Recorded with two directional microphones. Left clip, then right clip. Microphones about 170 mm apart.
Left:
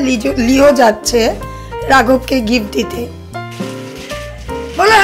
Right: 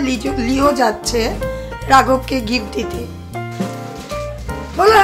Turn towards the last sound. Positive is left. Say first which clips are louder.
# left 2 dB
turn(degrees=5)  # may be behind; listen again after turning